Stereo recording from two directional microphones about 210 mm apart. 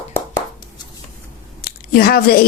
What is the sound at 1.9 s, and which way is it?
Speech, 45° left (ahead or behind).